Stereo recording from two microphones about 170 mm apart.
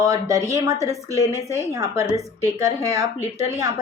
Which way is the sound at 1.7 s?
20° right (ahead or behind).